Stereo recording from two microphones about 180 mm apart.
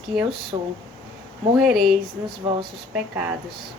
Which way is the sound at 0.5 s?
20° right (ahead or behind).